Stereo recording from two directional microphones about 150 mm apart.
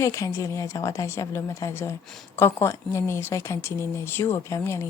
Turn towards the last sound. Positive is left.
turn(degrees=20)  # may be behind; listen again after turning